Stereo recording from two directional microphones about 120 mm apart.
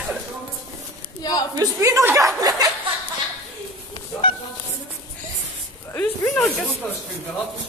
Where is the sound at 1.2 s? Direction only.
30° left (ahead or behind).